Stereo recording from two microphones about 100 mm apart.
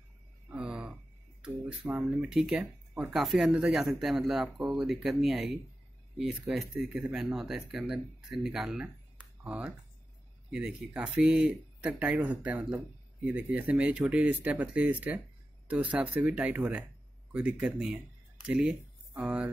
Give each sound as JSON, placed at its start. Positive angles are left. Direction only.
{"t": 0.5, "sound": "a sound", "side_deg": -10}
{"t": 2.0, "sound": "speech", "side_deg": -5}
{"t": 3.1, "sound": "speech", "side_deg": 0}